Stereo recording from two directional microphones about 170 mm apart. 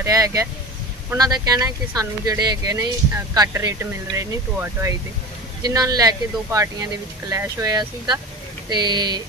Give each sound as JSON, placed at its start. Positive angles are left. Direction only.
{"t": 0.0, "sound": "speech", "side_deg": -20}